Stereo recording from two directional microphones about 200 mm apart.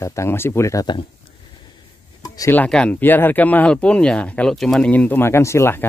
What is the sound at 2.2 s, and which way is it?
Speech, 15° left (ahead or behind).